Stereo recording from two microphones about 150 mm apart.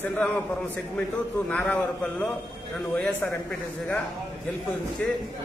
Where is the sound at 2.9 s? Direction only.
5° left (ahead or behind).